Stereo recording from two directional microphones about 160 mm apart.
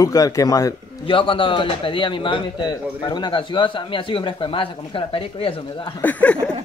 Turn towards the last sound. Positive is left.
turn(degrees=10)  # may be behind; listen again after turning